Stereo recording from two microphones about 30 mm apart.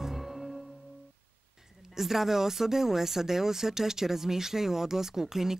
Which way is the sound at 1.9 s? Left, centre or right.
Centre.